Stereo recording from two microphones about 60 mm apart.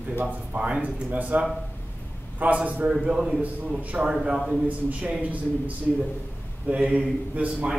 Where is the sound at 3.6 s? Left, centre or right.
Right.